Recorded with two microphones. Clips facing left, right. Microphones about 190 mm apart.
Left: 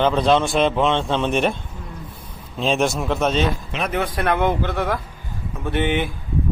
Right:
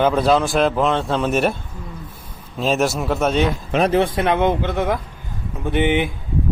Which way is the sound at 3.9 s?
30° right (ahead or behind).